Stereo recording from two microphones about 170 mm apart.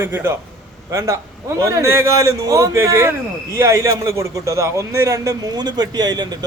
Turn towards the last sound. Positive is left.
turn(degrees=-25)  # may be behind; listen again after turning